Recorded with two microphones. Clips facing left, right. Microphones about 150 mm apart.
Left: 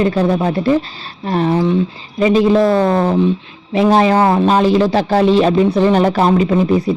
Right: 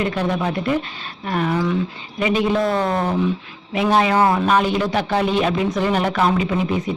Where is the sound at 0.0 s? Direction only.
35° left (ahead or behind).